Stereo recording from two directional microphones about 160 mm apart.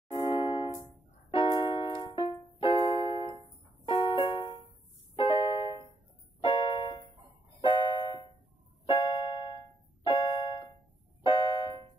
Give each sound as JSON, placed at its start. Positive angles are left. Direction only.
{"t": 0.1, "sound": "music", "side_deg": 30}